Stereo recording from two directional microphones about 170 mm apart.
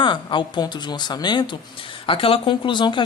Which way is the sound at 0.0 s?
25° left (ahead or behind).